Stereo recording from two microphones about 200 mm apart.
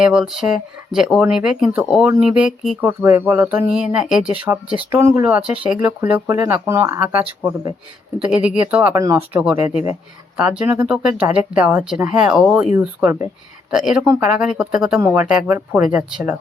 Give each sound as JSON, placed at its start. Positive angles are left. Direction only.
{"t": 0.0, "sound": "speech", "side_deg": -5}
{"t": 9.6, "sound": "speech", "side_deg": 35}
{"t": 10.6, "sound": "speech", "side_deg": -10}